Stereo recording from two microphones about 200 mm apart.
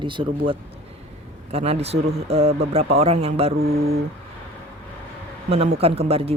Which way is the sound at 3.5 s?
50° right (ahead or behind).